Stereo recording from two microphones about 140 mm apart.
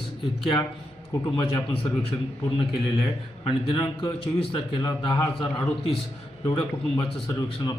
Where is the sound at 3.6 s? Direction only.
40° left (ahead or behind).